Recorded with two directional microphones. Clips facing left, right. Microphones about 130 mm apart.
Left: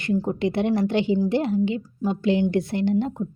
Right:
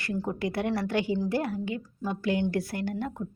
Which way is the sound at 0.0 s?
20° left (ahead or behind).